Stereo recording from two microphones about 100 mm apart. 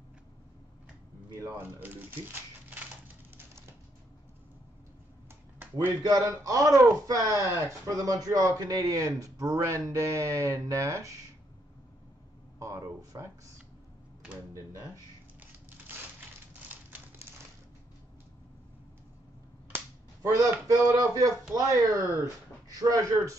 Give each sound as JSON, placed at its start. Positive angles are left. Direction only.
{"t": 1.8, "sound": "speech", "side_deg": -20}
{"t": 6.0, "sound": "speech", "side_deg": -35}
{"t": 12.5, "sound": "speech", "side_deg": -30}
{"t": 15.9, "sound": "crushing", "side_deg": -20}
{"t": 20.2, "sound": "speech", "side_deg": -35}